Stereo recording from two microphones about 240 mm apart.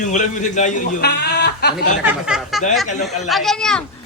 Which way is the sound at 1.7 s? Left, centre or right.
Centre.